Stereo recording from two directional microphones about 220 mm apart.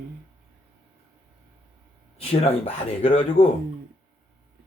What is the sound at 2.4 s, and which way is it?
Speech, 30° left (ahead or behind).